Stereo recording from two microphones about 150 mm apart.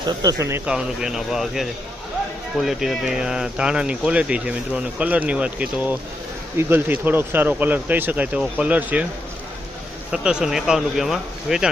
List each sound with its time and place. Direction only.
0.0 s speech: 30° right (ahead or behind)
0.6 s speech: 5° right (ahead or behind)
10.1 s speech: 5° right (ahead or behind)